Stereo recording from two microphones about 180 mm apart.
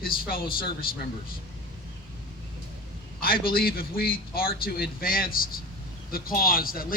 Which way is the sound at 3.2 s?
55° left (ahead or behind).